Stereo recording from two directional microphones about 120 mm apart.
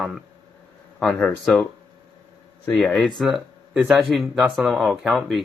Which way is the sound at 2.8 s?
5° left (ahead or behind).